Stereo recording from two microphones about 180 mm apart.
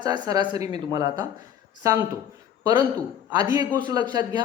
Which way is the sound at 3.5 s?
25° right (ahead or behind).